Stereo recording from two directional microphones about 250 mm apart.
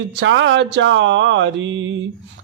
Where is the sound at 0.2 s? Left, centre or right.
Right.